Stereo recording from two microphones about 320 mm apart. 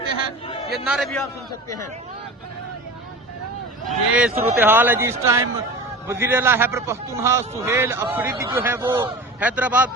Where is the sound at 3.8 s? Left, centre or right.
Centre.